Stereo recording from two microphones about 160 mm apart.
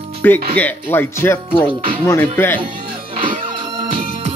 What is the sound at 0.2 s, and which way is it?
Speech, 15° left (ahead or behind).